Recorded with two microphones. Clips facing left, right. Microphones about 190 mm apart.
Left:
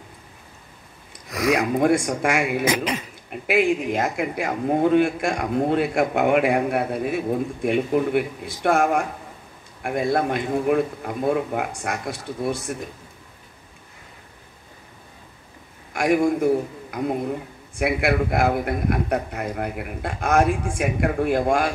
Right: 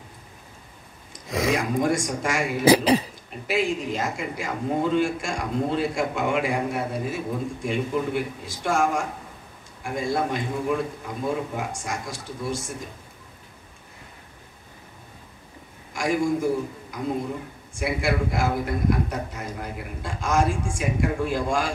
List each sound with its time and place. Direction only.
1.2 s a sound: 25° right (ahead or behind)
1.8 s a man's voice: 60° left (ahead or behind)
2.6 s speech: 35° right (ahead or behind)
3.4 s a man's voice: 55° left (ahead or behind)
15.9 s a man's voice: 60° left (ahead or behind)